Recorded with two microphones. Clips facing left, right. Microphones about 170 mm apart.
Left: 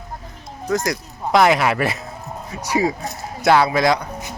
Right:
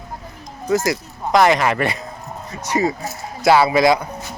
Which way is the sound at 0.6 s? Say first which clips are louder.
Right 3 dB; 5° right (ahead or behind).